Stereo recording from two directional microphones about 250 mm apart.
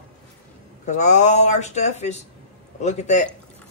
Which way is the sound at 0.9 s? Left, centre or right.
Left.